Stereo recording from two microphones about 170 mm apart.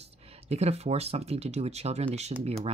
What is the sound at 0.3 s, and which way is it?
Speech, 40° right (ahead or behind).